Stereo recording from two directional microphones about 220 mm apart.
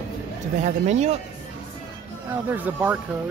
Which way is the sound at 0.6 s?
30° right (ahead or behind).